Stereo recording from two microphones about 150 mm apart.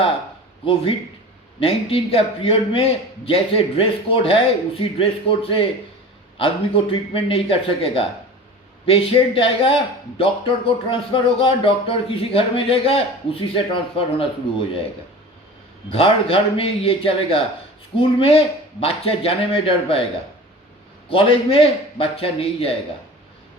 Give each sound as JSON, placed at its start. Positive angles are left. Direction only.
{"t": 0.6, "sound": "a man's voice", "side_deg": 40}
{"t": 15.9, "sound": "a man's voice", "side_deg": 40}
{"t": 21.1, "sound": "a man's voice", "side_deg": 35}